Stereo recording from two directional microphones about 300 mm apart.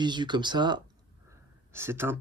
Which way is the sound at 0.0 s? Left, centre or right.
Centre.